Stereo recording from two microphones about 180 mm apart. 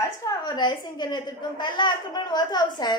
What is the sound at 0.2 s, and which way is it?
A woman's voice, 20° left (ahead or behind).